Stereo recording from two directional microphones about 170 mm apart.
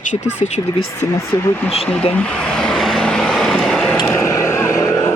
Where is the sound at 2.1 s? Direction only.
5° left (ahead or behind).